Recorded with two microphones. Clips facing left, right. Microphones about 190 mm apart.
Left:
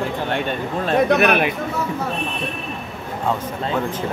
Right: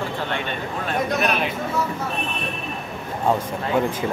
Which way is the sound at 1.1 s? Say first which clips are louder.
Left 5 dB; 65° left (ahead or behind).